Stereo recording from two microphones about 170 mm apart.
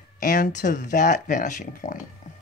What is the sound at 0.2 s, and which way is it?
Speech, 50° left (ahead or behind).